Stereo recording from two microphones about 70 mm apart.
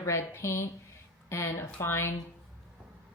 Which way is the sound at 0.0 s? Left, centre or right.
Left.